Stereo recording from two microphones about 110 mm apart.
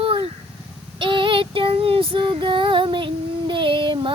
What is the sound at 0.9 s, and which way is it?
Female singing, 50° right (ahead or behind).